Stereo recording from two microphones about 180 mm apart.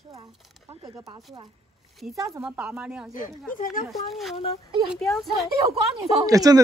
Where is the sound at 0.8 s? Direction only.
20° right (ahead or behind).